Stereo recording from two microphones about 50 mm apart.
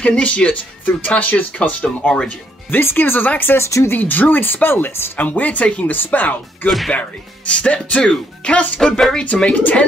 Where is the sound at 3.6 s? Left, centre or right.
Left.